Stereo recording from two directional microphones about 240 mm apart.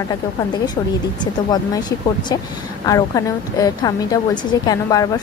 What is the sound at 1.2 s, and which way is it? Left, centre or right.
Speech, centre.